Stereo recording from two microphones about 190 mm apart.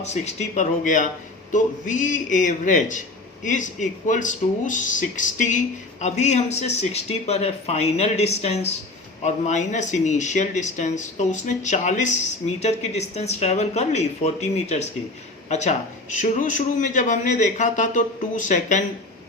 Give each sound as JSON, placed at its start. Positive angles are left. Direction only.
{"t": 0.0, "sound": "speech", "side_deg": 35}